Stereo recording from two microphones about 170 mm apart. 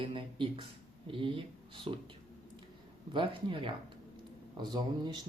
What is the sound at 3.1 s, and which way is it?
Speech, 30° right (ahead or behind).